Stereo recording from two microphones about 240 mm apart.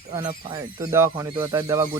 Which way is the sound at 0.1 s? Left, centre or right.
Right.